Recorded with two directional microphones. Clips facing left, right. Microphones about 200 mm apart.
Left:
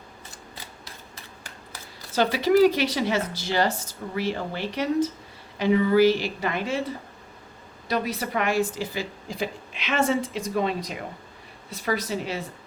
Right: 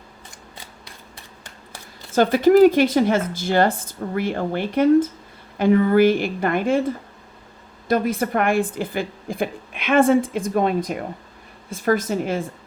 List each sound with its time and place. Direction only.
2.1 s a woman's voice: 50° right (ahead or behind)